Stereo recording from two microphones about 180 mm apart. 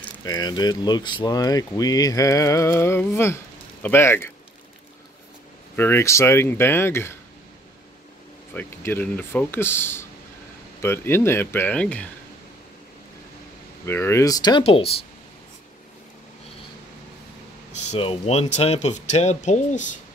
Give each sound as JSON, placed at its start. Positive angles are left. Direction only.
{"t": 0.2, "sound": "speech", "side_deg": 20}
{"t": 5.8, "sound": "speech", "side_deg": 15}
{"t": 8.5, "sound": "speech", "side_deg": 10}
{"t": 13.8, "sound": "speech", "side_deg": 15}
{"t": 14.6, "sound": "speech", "side_deg": 35}
{"t": 17.7, "sound": "speech", "side_deg": 35}